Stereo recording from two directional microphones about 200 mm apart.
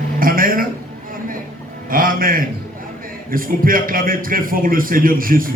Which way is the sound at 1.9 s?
45° right (ahead or behind).